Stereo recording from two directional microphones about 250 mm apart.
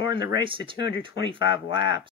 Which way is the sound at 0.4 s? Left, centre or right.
Centre.